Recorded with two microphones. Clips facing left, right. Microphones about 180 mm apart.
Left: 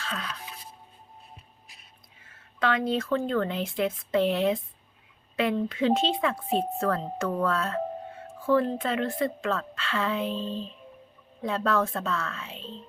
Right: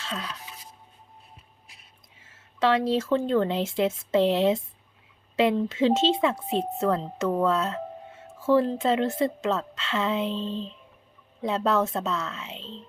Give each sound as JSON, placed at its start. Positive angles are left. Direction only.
{"t": 0.0, "sound": "speech", "side_deg": -25}
{"t": 2.2, "sound": "speech", "side_deg": -25}